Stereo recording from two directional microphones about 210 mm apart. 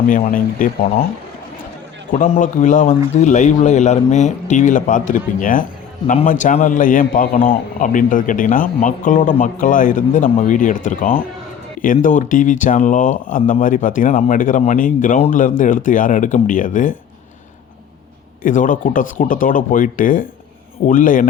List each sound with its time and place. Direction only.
0.1 s speech: 40° left (ahead or behind)
2.1 s speech: 35° left (ahead or behind)
18.4 s speech: 40° left (ahead or behind)